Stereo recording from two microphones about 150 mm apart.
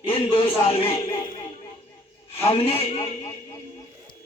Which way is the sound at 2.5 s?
40° left (ahead or behind).